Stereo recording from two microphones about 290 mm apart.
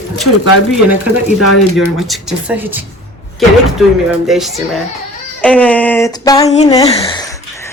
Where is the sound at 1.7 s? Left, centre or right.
Centre.